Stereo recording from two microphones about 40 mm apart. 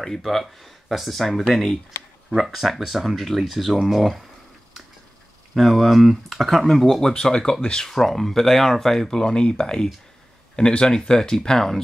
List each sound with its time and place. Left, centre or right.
0.0 s speech: centre
5.5 s speech: centre
7.1 s speech: centre
10.9 s speech: centre